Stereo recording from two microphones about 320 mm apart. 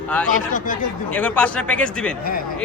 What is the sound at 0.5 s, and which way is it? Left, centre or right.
Speech, left.